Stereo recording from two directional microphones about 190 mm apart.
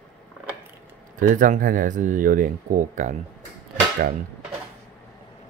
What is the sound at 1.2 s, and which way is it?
Speech, 45° right (ahead or behind).